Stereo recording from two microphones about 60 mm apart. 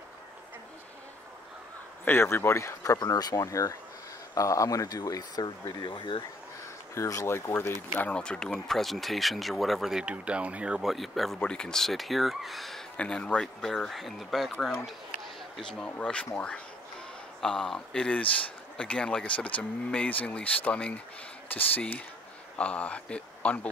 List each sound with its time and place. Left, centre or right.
2.0 s speech: left
2.8 s speech: left
7.0 s speech: left
7.2 s speech: left
8.0 s speech: centre
9.9 s speech: centre
10.8 s speech: centre
11.3 s speech: centre
12.9 s speech: centre
15.6 s speech: centre
17.4 s speech: centre